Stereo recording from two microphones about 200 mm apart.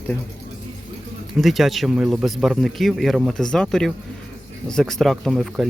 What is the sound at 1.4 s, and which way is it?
Speech, centre (ahead or behind).